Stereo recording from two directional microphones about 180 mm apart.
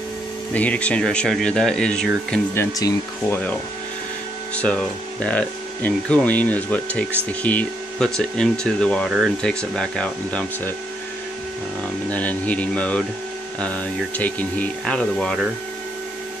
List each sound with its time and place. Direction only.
0.6 s speech: 5° left (ahead or behind)
4.6 s speech: 5° left (ahead or behind)
12.1 s speech: 10° left (ahead or behind)